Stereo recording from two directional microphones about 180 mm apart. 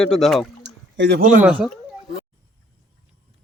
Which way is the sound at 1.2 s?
45° right (ahead or behind).